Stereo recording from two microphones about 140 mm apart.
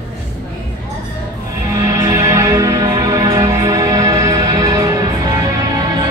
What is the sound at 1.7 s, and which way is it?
Music, 25° right (ahead or behind).